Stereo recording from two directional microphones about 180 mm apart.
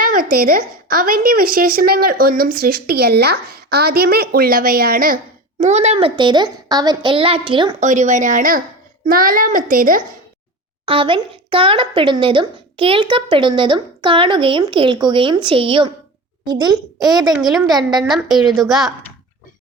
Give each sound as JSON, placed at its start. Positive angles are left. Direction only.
{"t": 0.0, "sound": "speech", "side_deg": -50}
{"t": 7.8, "sound": "speech", "side_deg": -40}
{"t": 10.8, "sound": "speech", "side_deg": -30}
{"t": 17.4, "sound": "a woman's voice", "side_deg": 0}